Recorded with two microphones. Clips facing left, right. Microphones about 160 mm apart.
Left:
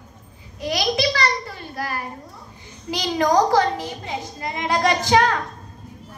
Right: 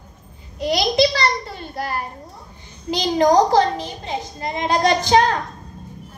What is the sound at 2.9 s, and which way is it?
A woman's voice, 25° right (ahead or behind).